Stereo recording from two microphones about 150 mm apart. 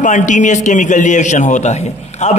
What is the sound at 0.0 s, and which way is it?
A man's voice, 55° left (ahead or behind).